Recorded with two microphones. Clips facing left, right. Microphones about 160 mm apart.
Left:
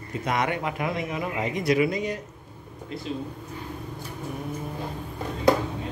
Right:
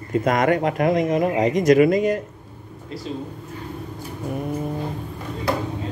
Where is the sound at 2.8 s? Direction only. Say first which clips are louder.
Right 2 dB; 35° right (ahead or behind).